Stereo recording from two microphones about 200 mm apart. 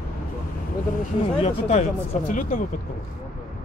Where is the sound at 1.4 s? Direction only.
35° left (ahead or behind).